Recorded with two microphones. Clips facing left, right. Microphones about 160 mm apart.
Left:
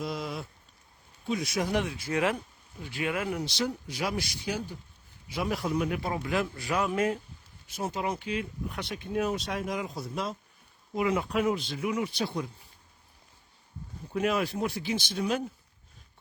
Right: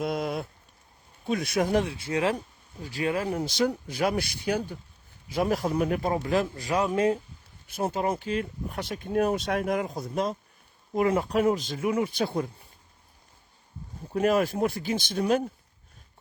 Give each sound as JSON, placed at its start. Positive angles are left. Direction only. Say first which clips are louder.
{"t": 0.0, "sound": "speech", "louder": "right 5 dB", "side_deg": -55}
{"t": 1.8, "sound": "speech", "louder": "right 2 dB", "side_deg": -30}
{"t": 3.3, "sound": "speech", "louder": "right 5 dB", "side_deg": -50}
{"t": 5.3, "sound": "speech", "louder": "right 4 dB", "side_deg": -45}
{"t": 7.7, "sound": "speech", "louder": "right 4 dB", "side_deg": -55}
{"t": 14.1, "sound": "speech", "louder": "right 5 dB", "side_deg": -45}